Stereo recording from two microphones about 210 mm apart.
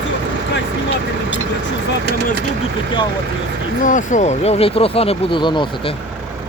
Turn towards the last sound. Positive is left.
turn(degrees=20)  # may be behind; listen again after turning